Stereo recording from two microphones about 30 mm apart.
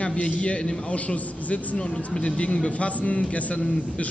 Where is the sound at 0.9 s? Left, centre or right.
Left.